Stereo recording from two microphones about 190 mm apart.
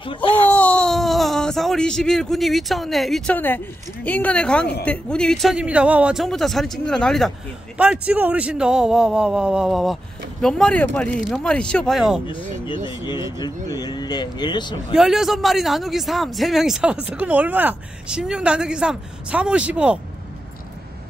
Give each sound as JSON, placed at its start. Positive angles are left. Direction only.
{"t": 0.0, "sound": "speech", "side_deg": 25}
{"t": 0.4, "sound": "speech", "side_deg": 5}
{"t": 12.3, "sound": "speech", "side_deg": 25}
{"t": 15.0, "sound": "speech", "side_deg": 0}